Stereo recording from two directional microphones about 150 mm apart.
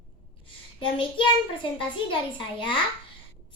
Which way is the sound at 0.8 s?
35° left (ahead or behind).